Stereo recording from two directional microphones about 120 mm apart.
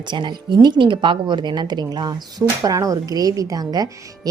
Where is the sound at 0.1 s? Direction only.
40° right (ahead or behind).